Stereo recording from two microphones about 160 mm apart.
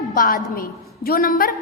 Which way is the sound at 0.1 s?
65° left (ahead or behind).